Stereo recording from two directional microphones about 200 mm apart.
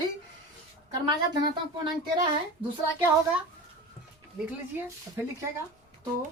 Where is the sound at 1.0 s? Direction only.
20° right (ahead or behind).